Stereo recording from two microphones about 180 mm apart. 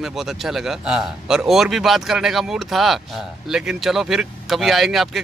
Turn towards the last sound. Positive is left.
turn(degrees=0)  # may be behind; listen again after turning